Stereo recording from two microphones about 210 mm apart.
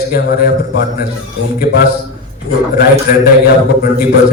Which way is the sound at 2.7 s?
45° left (ahead or behind).